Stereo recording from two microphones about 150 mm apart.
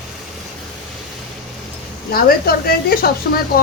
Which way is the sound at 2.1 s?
80° left.